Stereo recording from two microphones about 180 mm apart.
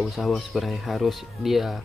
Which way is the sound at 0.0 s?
Centre (ahead or behind).